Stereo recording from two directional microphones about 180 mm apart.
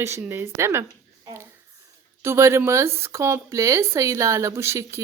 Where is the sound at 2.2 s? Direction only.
15° right (ahead or behind).